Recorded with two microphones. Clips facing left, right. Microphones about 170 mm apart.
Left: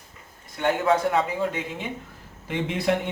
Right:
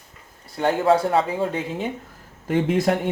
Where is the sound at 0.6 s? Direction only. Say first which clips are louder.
Right 3 dB; 35° right (ahead or behind).